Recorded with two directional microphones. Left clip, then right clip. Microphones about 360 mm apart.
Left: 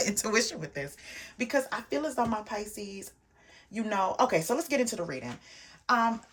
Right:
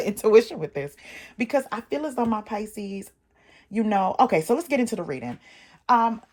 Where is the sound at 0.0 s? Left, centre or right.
Centre.